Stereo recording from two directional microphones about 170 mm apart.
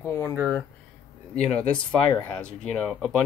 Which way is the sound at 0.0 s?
15° left (ahead or behind).